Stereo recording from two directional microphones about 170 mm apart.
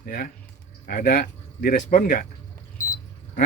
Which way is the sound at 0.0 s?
60° left (ahead or behind).